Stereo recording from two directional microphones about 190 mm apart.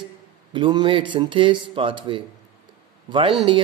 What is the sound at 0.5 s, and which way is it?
Speech, 25° right (ahead or behind).